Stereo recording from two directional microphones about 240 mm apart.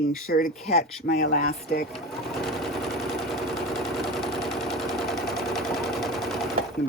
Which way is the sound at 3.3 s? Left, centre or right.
Centre.